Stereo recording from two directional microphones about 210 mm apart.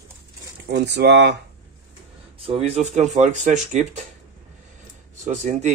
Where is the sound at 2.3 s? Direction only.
25° right (ahead or behind).